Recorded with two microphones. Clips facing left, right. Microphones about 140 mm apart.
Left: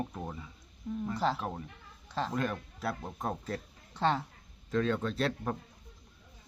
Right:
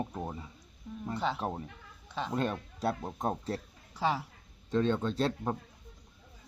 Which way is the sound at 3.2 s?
35° right (ahead or behind).